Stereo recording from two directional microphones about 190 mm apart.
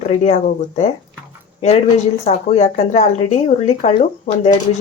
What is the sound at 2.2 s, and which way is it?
Speech, 35° left (ahead or behind).